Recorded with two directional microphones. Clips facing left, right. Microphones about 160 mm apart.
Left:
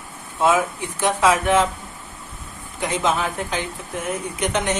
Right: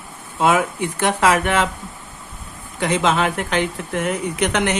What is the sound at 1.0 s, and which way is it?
Speech, 65° right (ahead or behind).